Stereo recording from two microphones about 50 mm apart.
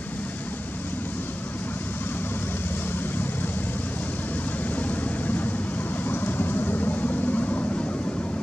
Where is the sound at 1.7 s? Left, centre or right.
Left.